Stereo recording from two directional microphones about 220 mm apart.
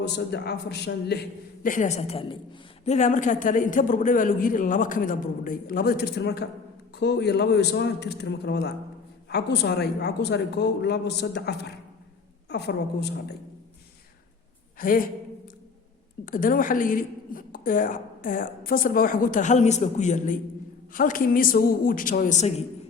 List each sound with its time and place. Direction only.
0.0 s a woman's voice: 50° left (ahead or behind)
1.6 s a woman's voice: 35° left (ahead or behind)
14.8 s a woman's voice: 40° left (ahead or behind)
16.2 s a woman's voice: 40° left (ahead or behind)